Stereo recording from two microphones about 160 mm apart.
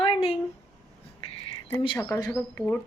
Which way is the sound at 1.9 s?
20° left (ahead or behind).